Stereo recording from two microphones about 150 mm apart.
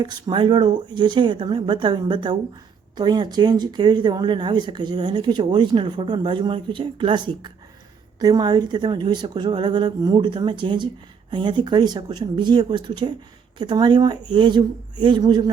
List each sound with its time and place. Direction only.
0.0 s speech: 30° right (ahead or behind)